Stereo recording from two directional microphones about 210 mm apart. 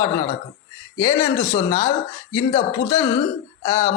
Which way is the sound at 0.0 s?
15° left (ahead or behind).